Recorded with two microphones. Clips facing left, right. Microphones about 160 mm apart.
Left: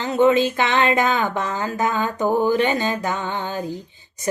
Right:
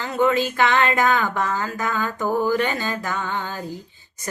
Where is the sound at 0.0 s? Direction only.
20° left (ahead or behind).